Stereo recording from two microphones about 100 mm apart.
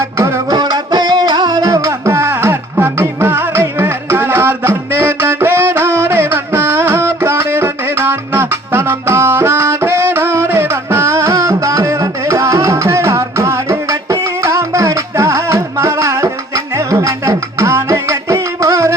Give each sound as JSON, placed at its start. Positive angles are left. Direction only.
{"t": 0.0, "sound": "music", "side_deg": -30}